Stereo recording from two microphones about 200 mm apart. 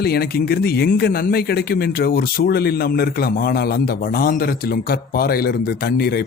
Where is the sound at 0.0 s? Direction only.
50° left (ahead or behind).